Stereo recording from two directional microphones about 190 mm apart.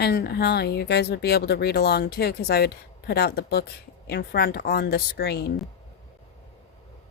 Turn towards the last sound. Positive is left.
turn(degrees=55)  # may be behind; listen again after turning